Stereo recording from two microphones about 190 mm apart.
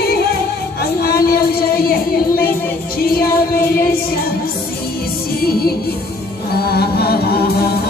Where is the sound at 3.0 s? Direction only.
50° left (ahead or behind).